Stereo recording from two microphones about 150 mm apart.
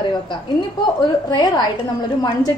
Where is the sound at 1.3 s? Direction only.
25° left (ahead or behind).